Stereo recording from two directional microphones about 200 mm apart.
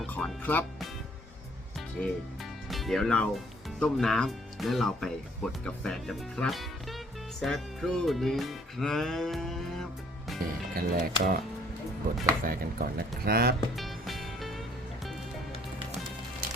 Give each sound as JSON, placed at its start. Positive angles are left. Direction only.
{"t": 0.0, "sound": "speech", "side_deg": 5}
{"t": 2.0, "sound": "speech", "side_deg": 0}
{"t": 10.8, "sound": "speech", "side_deg": -45}
{"t": 12.5, "sound": "speech", "side_deg": -50}
{"t": 13.7, "sound": "music", "side_deg": 0}